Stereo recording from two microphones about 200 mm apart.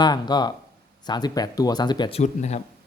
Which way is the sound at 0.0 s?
20° left (ahead or behind).